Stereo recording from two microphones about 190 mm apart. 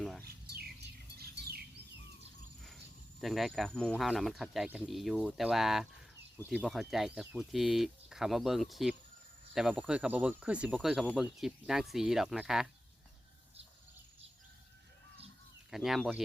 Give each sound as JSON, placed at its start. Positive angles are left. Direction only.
{"t": 0.0, "sound": "bird", "side_deg": 0}
{"t": 1.2, "sound": "bird", "side_deg": -55}
{"t": 2.6, "sound": "speech", "side_deg": 0}
{"t": 15.7, "sound": "speech", "side_deg": 0}